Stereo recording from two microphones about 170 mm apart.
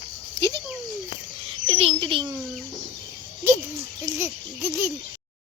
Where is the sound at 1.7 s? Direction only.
35° right (ahead or behind).